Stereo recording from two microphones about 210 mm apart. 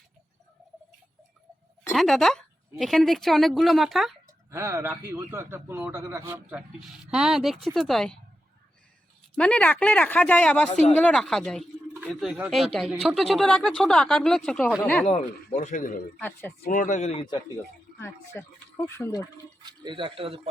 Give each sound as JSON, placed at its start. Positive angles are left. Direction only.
{"t": 1.9, "sound": "speech", "side_deg": 0}
{"t": 4.5, "sound": "a man's voice", "side_deg": -15}
{"t": 9.3, "sound": "speech", "side_deg": 5}
{"t": 15.4, "sound": "a man's voice", "side_deg": 35}
{"t": 18.9, "sound": "speech", "side_deg": 10}
{"t": 19.6, "sound": "speech", "side_deg": -20}